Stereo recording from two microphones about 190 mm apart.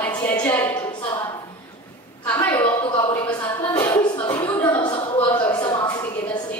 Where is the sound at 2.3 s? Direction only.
15° left (ahead or behind).